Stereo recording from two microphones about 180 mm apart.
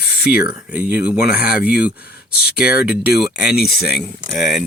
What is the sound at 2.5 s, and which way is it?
Speech, 60° left (ahead or behind).